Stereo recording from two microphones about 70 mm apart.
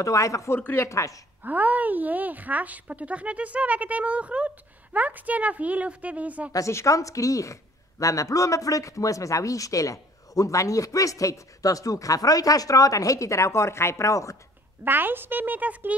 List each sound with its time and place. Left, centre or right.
0.0 s a man's voice: left
1.4 s speech: right
6.5 s a man's voice: left
14.9 s speech: right